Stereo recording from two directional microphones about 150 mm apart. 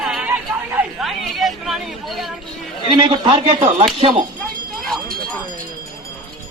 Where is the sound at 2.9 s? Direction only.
30° right (ahead or behind).